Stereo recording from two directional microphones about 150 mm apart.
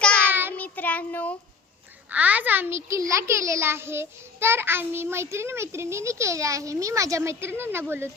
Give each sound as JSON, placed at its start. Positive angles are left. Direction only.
{"t": 0.3, "sound": "child singing", "side_deg": -15}
{"t": 0.5, "sound": "child singing", "side_deg": 10}
{"t": 2.0, "sound": "a child's voice", "side_deg": -10}